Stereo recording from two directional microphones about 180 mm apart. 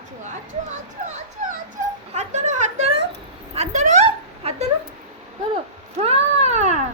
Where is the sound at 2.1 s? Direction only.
40° right (ahead or behind).